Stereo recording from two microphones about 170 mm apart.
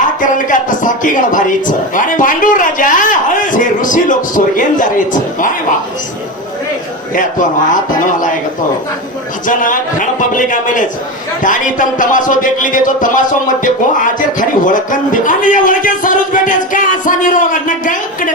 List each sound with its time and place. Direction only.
0.2 s speech: 50° left (ahead or behind)
7.9 s speech: 50° left (ahead or behind)
9.5 s speech: 50° left (ahead or behind)